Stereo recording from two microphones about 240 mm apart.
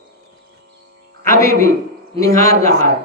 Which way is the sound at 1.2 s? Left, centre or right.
Centre.